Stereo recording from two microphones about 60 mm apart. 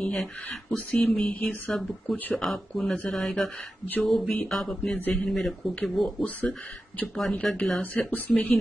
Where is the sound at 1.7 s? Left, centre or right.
Centre.